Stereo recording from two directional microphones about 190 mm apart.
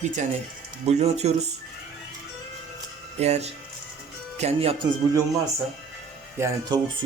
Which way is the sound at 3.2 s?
35° right (ahead or behind).